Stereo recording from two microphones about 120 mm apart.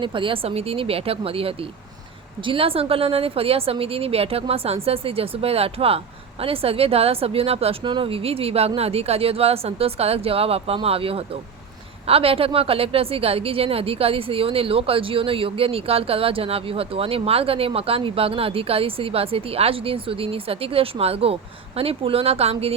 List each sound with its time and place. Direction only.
0.0 s a woman's voice: 45° right (ahead or behind)